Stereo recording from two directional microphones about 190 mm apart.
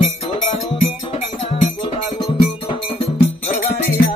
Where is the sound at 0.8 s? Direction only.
40° left (ahead or behind).